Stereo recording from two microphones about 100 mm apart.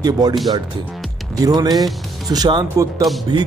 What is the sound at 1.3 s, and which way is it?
A man's voice, 40° right (ahead or behind).